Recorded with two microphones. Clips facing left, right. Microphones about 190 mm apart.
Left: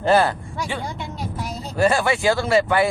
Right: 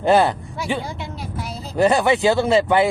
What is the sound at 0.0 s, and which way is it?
Speech, 20° right (ahead or behind).